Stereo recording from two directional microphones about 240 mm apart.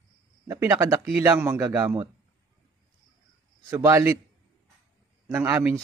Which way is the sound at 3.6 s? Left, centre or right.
Centre.